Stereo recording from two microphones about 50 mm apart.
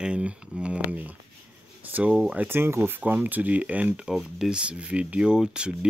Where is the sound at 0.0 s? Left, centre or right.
Right.